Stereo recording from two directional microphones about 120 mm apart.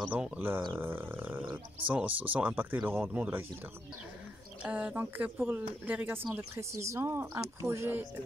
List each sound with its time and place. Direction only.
0.1 s speech: 15° right (ahead or behind)
4.6 s speech: 15° right (ahead or behind)